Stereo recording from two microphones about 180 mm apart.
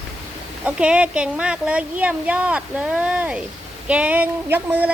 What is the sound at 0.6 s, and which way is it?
Speech, 5° right (ahead or behind).